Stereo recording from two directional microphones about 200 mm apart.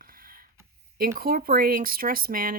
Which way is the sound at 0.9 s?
45° right (ahead or behind).